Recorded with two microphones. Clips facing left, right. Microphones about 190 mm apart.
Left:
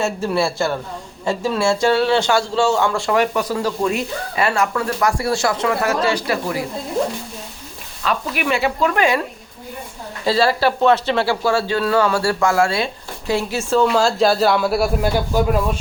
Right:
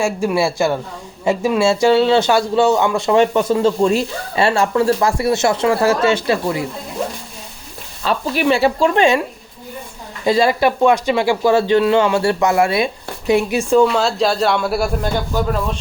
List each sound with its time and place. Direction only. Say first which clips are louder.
0.0 s a man's voice: right 2 dB; 10° right (ahead or behind)
8.0 s speech: right 4 dB; 30° right (ahead or behind)
10.2 s speech: right 2 dB; 15° right (ahead or behind)
13.8 s a man's voice: even; centre (ahead or behind)